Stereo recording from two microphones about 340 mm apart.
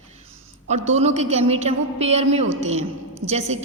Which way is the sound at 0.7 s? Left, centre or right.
Centre.